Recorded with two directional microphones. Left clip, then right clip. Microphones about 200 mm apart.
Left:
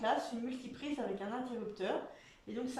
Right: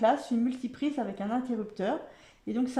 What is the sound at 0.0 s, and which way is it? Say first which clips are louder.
Speech: right 9 dB; 45° right (ahead or behind).